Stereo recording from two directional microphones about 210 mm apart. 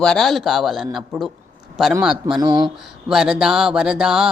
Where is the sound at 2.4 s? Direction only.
20° right (ahead or behind).